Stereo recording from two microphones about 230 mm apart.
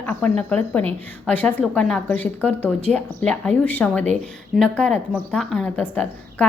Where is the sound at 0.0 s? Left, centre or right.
Centre.